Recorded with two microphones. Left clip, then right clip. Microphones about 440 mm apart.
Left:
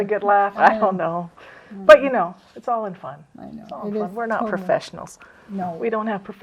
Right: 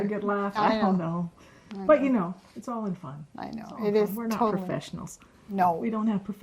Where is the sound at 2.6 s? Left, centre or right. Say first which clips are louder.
Left 11 dB; left.